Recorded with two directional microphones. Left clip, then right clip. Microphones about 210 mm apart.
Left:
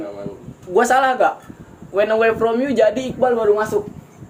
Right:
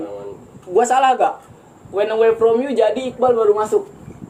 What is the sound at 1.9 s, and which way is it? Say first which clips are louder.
A man's voice: even; 30° left (ahead or behind).